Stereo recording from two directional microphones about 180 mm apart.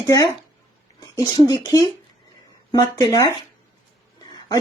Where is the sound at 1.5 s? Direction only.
20° left (ahead or behind).